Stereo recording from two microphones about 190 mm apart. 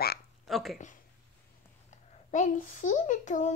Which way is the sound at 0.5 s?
Centre (ahead or behind).